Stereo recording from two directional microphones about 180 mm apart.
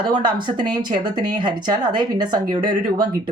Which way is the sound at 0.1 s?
25° right (ahead or behind).